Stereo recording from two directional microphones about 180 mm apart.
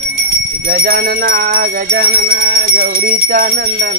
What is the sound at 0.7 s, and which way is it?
Music, 60° right (ahead or behind).